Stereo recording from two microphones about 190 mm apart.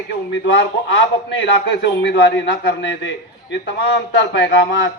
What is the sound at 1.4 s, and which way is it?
A man's voice, 65° left (ahead or behind).